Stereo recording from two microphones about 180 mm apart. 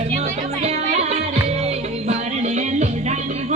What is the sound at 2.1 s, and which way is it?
Music, 40° right (ahead or behind).